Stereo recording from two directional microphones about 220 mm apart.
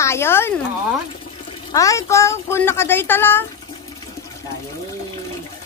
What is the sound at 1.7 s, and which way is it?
A child's voice, 15° left (ahead or behind).